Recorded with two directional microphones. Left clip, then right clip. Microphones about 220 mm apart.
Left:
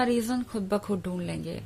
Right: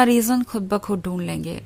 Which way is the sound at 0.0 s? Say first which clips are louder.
Right 9 dB; 30° right (ahead or behind).